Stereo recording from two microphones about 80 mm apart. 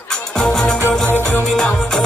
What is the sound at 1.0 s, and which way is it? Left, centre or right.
Music, left.